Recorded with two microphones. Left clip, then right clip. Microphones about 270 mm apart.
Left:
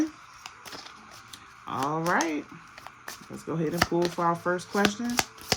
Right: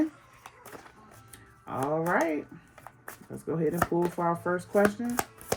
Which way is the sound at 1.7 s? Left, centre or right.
Centre.